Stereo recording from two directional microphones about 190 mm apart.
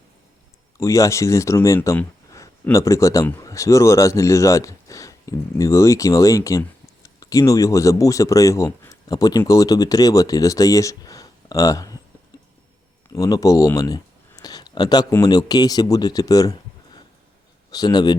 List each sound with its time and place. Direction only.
0.8 s speech: 15° left (ahead or behind)
13.1 s a man's voice: 20° left (ahead or behind)